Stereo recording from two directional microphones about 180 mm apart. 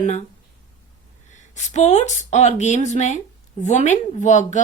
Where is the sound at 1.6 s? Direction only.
40° left (ahead or behind).